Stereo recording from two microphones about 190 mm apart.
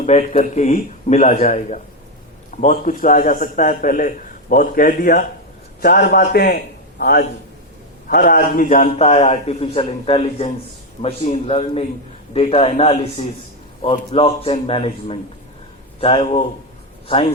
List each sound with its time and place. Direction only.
0.0 s a man's voice: 35° left (ahead or behind); by 7.3 s 60° left (ahead or behind)
8.0 s a man's voice: 45° left (ahead or behind)